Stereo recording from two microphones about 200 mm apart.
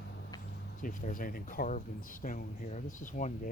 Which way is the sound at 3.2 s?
40° left (ahead or behind).